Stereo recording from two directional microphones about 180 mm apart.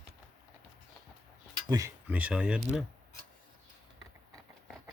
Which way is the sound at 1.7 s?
15° right (ahead or behind).